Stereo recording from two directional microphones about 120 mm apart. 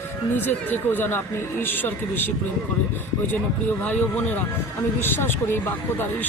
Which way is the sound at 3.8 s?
10° left (ahead or behind).